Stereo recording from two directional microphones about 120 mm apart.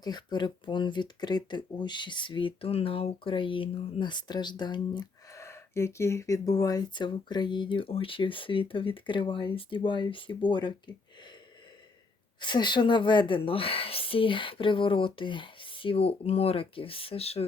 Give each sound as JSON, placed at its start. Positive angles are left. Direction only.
{"t": 0.0, "sound": "speech", "side_deg": 35}
{"t": 5.4, "sound": "speech", "side_deg": 25}
{"t": 12.4, "sound": "speech", "side_deg": 40}